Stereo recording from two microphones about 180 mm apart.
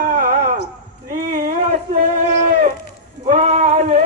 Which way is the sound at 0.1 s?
45° right (ahead or behind).